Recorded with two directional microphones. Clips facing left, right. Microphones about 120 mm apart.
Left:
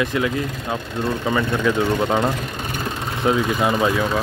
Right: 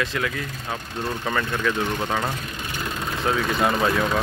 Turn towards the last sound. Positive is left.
turn(degrees=5)  # may be behind; listen again after turning